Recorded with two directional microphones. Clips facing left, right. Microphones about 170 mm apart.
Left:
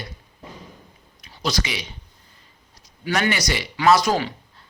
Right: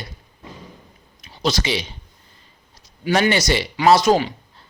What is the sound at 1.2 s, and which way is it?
Speech, 25° right (ahead or behind).